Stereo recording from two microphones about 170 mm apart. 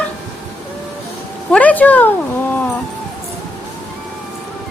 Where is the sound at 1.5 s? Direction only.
10° left (ahead or behind).